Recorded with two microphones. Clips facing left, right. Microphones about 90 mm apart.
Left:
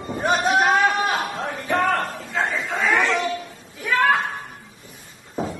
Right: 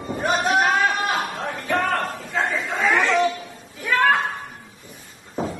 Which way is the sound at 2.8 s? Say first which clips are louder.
Right 2 dB; centre (ahead or behind).